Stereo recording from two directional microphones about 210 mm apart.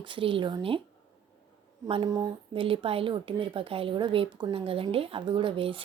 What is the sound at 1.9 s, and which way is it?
Speech, 20° right (ahead or behind).